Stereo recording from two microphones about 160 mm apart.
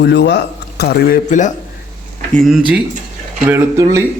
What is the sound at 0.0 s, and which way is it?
Speech, 90° left.